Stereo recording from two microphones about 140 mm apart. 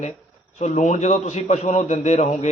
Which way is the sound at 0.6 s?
60° left (ahead or behind).